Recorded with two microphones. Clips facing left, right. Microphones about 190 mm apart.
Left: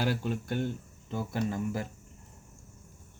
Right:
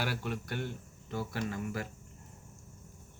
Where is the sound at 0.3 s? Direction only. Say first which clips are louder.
Left 5 dB; 20° left (ahead or behind).